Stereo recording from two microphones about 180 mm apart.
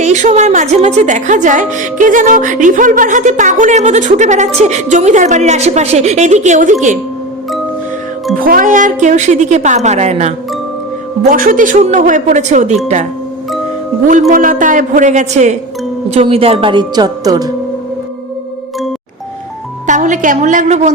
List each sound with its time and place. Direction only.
0.0 s a woman's voice: 40° right (ahead or behind)
8.4 s a woman's voice: 50° right (ahead or behind)
14.1 s a woman's voice: 50° right (ahead or behind); by 17.5 s 20° right (ahead or behind)
19.9 s speech: 45° right (ahead or behind)